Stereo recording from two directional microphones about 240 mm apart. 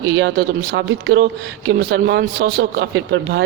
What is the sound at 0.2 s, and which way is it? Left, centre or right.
Speech, right.